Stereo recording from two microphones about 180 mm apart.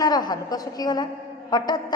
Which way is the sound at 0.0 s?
20° left (ahead or behind).